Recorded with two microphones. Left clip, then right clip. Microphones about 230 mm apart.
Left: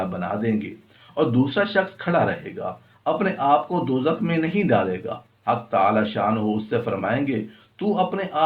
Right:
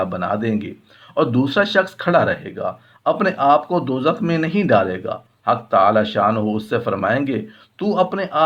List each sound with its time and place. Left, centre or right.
0.0 s speech: right